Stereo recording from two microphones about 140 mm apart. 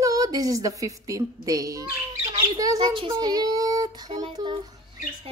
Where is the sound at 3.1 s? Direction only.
30° right (ahead or behind).